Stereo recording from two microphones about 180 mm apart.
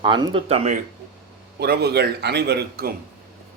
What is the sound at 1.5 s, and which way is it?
A man's voice, 65° right (ahead or behind).